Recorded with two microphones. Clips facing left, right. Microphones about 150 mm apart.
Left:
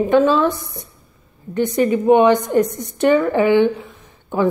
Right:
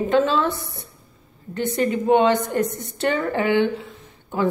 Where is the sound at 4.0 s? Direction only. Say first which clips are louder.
Left 5 dB; 20° left (ahead or behind).